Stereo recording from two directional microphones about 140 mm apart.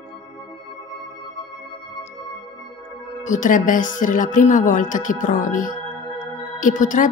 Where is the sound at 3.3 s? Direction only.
70° left (ahead or behind).